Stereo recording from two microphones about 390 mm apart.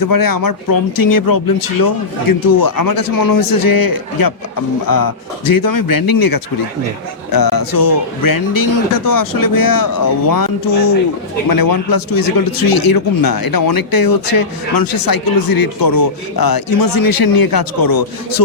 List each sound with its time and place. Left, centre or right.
0.0 s speech: left